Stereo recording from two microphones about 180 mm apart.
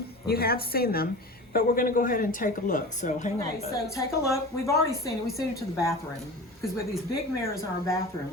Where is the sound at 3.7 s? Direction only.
15° left (ahead or behind).